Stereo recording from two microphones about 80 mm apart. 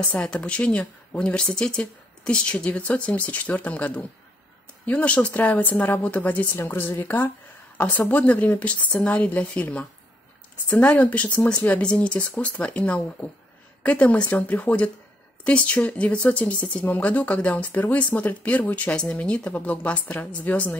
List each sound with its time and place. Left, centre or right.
0.0 s speech: centre
6.5 s speech: left; by 20.7 s centre